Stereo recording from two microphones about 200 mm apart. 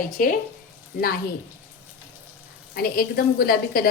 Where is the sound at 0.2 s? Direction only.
40° left (ahead or behind).